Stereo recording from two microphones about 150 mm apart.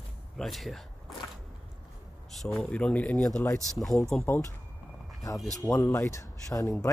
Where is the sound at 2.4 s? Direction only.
10° left (ahead or behind).